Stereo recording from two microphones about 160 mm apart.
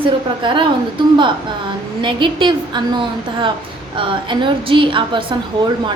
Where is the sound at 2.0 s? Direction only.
30° right (ahead or behind).